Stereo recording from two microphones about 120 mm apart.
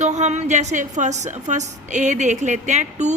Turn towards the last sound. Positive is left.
turn(degrees=-75)  # may be behind; listen again after turning